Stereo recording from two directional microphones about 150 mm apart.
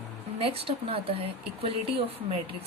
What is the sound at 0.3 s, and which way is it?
A woman's voice, 40° right (ahead or behind).